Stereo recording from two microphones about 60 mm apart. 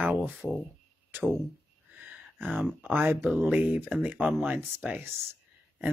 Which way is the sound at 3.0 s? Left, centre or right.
Right.